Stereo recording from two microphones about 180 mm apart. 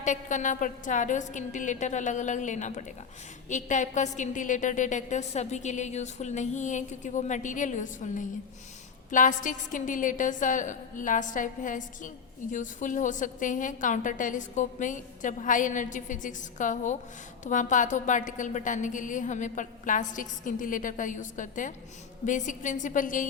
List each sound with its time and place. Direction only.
0.0 s a woman's voice: 45° left (ahead or behind)